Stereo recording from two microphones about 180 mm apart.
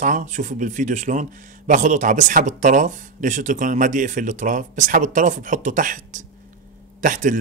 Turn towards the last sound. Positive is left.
turn(degrees=-45)  # may be behind; listen again after turning